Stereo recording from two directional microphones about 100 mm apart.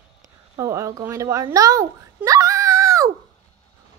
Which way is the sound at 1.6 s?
35° right (ahead or behind).